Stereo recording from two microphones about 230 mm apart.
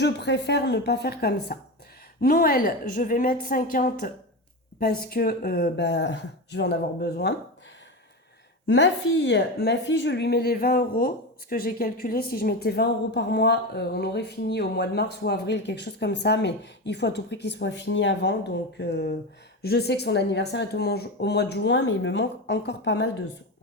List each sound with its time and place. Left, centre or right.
0.0 s a woman's voice: left
8.6 s a woman's voice: left